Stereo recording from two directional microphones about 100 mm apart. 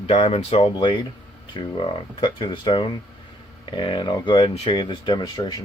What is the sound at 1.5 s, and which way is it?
Speech, 60° left (ahead or behind).